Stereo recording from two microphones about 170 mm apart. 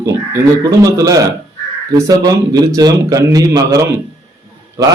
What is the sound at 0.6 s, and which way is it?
A man's voice, 20° right (ahead or behind).